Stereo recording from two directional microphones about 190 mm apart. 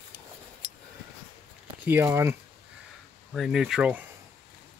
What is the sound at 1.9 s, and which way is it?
Speech, 15° right (ahead or behind).